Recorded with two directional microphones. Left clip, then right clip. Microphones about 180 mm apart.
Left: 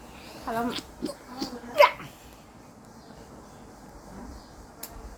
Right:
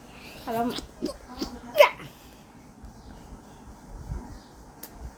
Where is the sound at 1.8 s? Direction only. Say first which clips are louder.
Right 1 dB; 20° right (ahead or behind).